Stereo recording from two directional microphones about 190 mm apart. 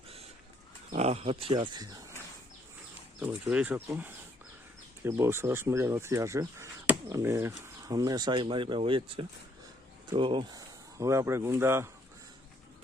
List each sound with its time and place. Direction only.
0.9 s speech: 35° right (ahead or behind)
3.2 s speech: 5° right (ahead or behind)